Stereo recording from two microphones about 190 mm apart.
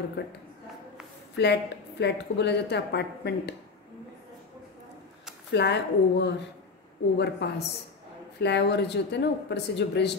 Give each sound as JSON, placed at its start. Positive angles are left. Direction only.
{"t": 0.2, "sound": "a woman's voice", "side_deg": 60}
{"t": 5.5, "sound": "a woman's voice", "side_deg": 65}